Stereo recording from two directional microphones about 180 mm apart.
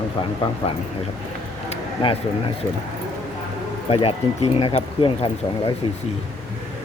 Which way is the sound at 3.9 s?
35° left (ahead or behind).